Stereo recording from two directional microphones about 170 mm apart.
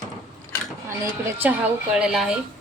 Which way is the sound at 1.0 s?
15° right (ahead or behind).